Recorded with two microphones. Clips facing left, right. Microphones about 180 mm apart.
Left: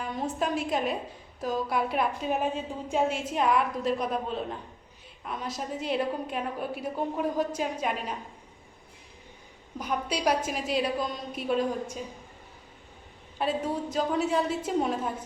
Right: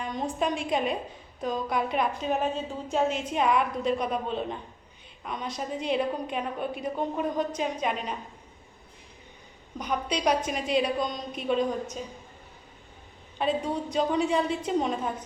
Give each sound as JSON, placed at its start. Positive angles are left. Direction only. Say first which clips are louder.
{"t": 0.0, "sound": "a woman's voice", "louder": "right 1 dB", "side_deg": 5}
{"t": 9.7, "sound": "a woman's voice", "louder": "right 1 dB", "side_deg": 5}
{"t": 13.4, "sound": "a woman's voice", "louder": "right 1 dB", "side_deg": 5}